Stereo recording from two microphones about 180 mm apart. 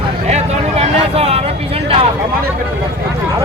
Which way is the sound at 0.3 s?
35° right (ahead or behind).